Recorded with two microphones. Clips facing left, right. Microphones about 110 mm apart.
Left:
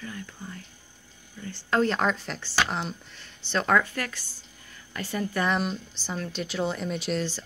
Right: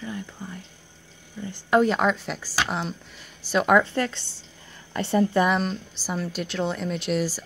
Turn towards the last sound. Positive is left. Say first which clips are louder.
# right 3 dB
turn(degrees=-5)  # may be behind; listen again after turning